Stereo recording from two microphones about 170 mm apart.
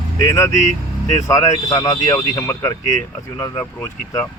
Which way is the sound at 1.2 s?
20° left (ahead or behind).